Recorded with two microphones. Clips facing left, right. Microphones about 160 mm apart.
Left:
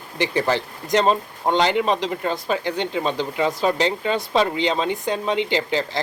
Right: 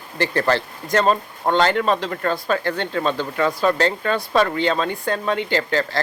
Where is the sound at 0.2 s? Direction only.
15° left (ahead or behind).